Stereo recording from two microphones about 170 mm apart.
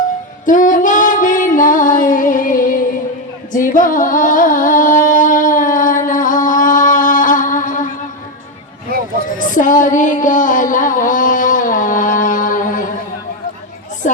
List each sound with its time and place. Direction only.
0.4 s female singing: 50° left (ahead or behind)
3.5 s music: 50° left (ahead or behind)
9.4 s a sound: 50° left (ahead or behind)
14.0 s music: 50° left (ahead or behind)